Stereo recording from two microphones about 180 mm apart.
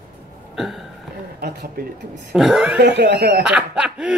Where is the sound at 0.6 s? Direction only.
Centre (ahead or behind).